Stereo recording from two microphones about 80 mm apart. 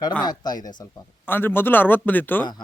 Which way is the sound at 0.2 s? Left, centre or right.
Left.